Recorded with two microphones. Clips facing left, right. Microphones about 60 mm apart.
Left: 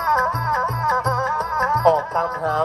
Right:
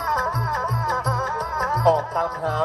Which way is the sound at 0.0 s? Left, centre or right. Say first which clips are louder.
Left 4 dB; left.